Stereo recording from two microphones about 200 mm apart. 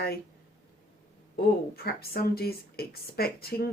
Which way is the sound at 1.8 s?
50° left (ahead or behind).